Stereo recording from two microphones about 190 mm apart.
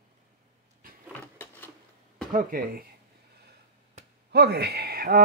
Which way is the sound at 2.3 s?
45° right (ahead or behind).